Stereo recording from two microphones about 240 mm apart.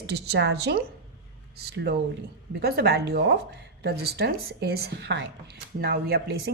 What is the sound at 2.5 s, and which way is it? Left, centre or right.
Speech, right.